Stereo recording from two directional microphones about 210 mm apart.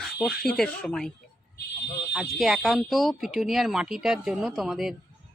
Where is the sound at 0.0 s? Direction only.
Centre (ahead or behind).